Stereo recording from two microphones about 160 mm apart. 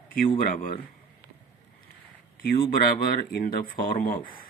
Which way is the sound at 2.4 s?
65° left (ahead or behind).